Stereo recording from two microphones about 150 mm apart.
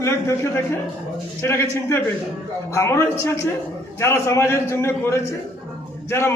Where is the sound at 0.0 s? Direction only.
20° left (ahead or behind).